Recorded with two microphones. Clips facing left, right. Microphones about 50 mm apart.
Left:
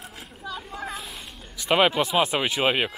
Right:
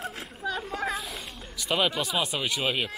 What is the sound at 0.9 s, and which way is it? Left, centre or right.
Cat, centre.